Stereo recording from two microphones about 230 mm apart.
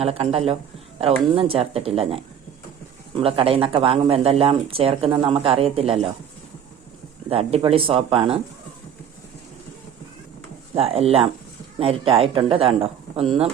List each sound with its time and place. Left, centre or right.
0.0 s speech: right
7.3 s speech: right
10.8 s speech: right